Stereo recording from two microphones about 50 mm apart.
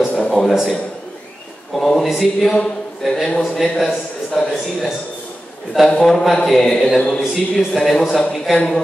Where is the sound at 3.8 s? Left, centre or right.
Centre.